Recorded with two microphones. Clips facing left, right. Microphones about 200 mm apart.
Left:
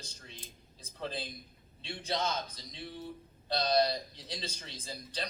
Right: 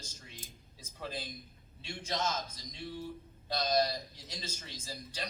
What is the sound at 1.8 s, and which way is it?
A man's voice, 35° left (ahead or behind).